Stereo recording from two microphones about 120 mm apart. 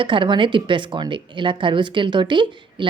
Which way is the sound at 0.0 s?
45° right (ahead or behind).